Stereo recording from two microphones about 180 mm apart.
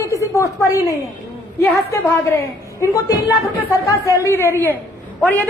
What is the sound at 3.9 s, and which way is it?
Speech, 15° left (ahead or behind).